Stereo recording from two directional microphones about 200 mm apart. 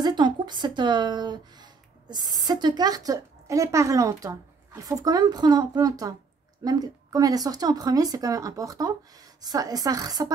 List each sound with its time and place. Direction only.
0.0 s speech: 20° right (ahead or behind)